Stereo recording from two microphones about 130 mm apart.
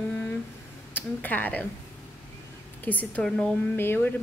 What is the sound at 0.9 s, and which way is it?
Speech, 15° left (ahead or behind).